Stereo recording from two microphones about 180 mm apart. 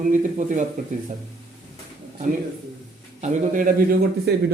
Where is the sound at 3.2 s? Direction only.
45° right (ahead or behind).